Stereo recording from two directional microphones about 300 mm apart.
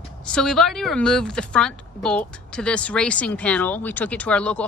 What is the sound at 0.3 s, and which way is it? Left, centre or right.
A woman's voice, centre.